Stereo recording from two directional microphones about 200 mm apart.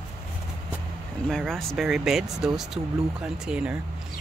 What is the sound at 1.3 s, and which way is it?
Speech, centre (ahead or behind).